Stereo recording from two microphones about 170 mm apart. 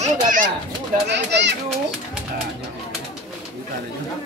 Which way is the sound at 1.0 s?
90° right.